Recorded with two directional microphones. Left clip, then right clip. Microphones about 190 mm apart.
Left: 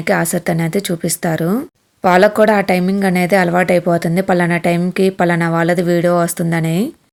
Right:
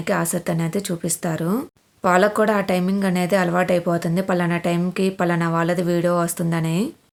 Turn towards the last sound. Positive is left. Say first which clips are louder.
# left 6 dB
turn(degrees=25)  # may be behind; listen again after turning